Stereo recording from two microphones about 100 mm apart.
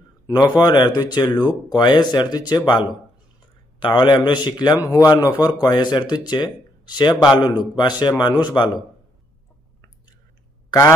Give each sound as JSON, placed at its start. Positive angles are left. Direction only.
{"t": 0.6, "sound": "a man's voice", "side_deg": 45}
{"t": 1.4, "sound": "speech", "side_deg": -10}
{"t": 1.8, "sound": "a man's voice", "side_deg": 45}